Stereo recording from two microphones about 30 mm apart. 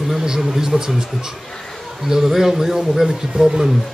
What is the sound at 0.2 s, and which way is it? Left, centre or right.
Speech, centre.